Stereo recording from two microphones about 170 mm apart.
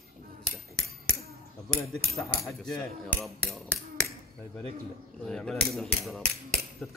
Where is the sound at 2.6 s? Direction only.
Centre (ahead or behind).